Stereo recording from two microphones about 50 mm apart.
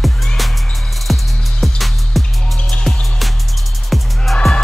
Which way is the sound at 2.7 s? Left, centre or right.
Centre.